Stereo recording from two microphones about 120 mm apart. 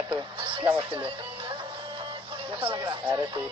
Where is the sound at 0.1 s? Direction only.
45° right (ahead or behind).